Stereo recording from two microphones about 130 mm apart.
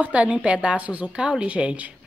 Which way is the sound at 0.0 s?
10° right (ahead or behind).